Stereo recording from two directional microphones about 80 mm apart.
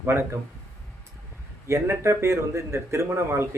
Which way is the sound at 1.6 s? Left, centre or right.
Right.